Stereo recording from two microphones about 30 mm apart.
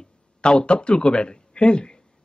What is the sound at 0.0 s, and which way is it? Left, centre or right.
A man's voice, left.